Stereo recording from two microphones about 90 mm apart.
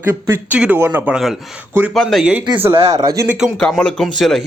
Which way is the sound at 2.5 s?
25° right (ahead or behind).